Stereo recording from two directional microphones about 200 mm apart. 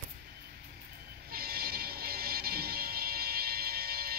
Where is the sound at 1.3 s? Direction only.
50° right (ahead or behind).